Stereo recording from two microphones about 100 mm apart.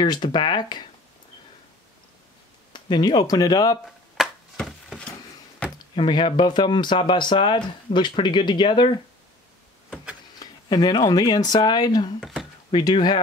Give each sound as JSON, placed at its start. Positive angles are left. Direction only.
{"t": 0.0, "sound": "speech", "side_deg": 45}
{"t": 2.7, "sound": "speech", "side_deg": 50}
{"t": 3.8, "sound": "a sound", "side_deg": 0}
{"t": 5.9, "sound": "speech", "side_deg": 55}
{"t": 10.4, "sound": "speech", "side_deg": 40}
{"t": 12.2, "sound": "speech", "side_deg": 0}
{"t": 12.9, "sound": "speech", "side_deg": 55}